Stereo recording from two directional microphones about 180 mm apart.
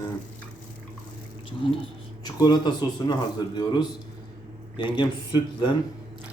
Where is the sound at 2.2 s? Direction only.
25° left (ahead or behind).